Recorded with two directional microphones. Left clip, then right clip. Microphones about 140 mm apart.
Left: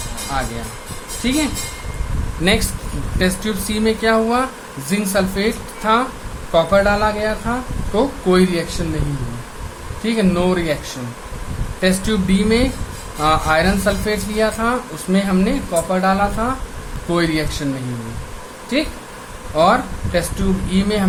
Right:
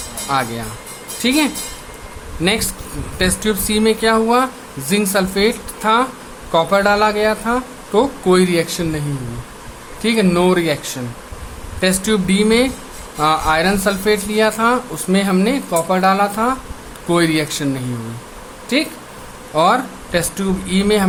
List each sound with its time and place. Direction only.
2.4 s speech: 25° right (ahead or behind)
3.2 s speech: 35° right (ahead or behind)
10.0 s speech: 40° right (ahead or behind)
18.7 s speech: 35° right (ahead or behind)